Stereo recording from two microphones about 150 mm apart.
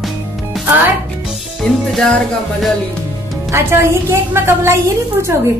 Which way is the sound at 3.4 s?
20° right (ahead or behind).